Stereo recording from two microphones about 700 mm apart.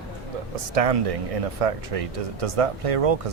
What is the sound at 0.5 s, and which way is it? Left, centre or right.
Speech, right.